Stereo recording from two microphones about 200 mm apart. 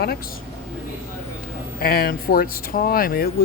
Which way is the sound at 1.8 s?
50° left (ahead or behind).